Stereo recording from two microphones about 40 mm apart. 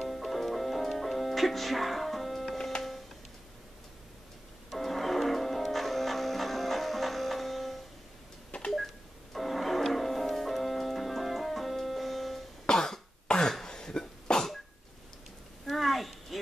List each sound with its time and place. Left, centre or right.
0.0 s music: centre
4.6 s music: centre
8.5 s telephone dialing: left
8.7 s music: centre
12.6 s cough: centre
15.6 s a sound: centre